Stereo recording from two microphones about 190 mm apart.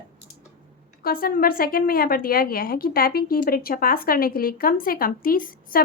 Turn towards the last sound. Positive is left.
turn(degrees=50)  # may be behind; listen again after turning